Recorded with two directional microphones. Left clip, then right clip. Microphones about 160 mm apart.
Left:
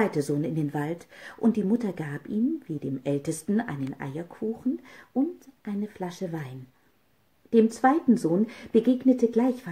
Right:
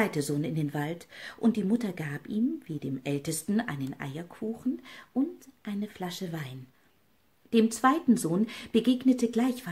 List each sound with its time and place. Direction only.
0.0 s speech: 15° right (ahead or behind)
7.5 s speech: 15° right (ahead or behind)
8.1 s speech: 30° right (ahead or behind)
8.5 s speech: 15° right (ahead or behind)